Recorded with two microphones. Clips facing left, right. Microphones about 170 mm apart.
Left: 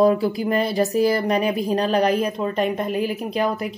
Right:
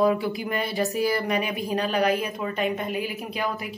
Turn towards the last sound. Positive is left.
turn(degrees=40)  # may be behind; listen again after turning